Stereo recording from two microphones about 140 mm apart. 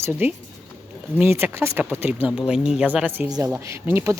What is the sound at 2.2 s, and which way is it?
Speech, 5° right (ahead or behind).